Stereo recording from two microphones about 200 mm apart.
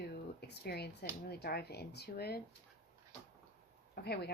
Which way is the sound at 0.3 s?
55° left (ahead or behind).